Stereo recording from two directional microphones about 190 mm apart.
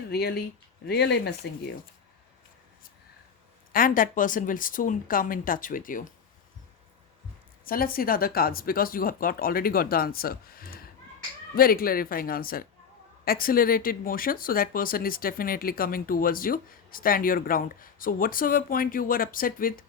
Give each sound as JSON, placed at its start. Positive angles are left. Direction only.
{"t": 0.1, "sound": "speech", "side_deg": 60}
{"t": 3.7, "sound": "speech", "side_deg": 45}
{"t": 7.6, "sound": "speech", "side_deg": 50}